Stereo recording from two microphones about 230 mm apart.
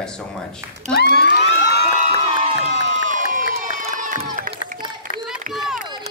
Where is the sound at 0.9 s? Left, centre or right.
Left.